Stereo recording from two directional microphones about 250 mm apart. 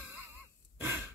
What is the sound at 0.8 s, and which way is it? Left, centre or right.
Gasp, centre.